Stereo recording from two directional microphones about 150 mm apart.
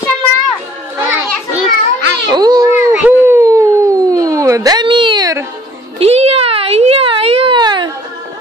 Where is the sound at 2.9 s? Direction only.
10° right (ahead or behind).